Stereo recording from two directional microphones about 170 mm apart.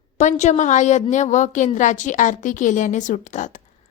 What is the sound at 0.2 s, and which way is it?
A woman's voice, 45° left (ahead or behind).